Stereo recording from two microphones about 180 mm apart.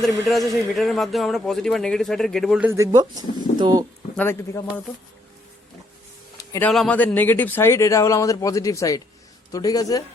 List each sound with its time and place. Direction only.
0.3 s a man's voice: centre (ahead or behind)
2.6 s speech: 15° right (ahead or behind)
4.2 s speech: 10° left (ahead or behind)
6.3 s a sound: 20° left (ahead or behind)
6.7 s speech: 5° left (ahead or behind); by 10.0 s 20° left (ahead or behind)